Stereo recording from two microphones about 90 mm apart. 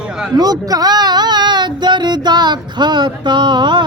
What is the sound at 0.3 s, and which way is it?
Speech, 45° right (ahead or behind).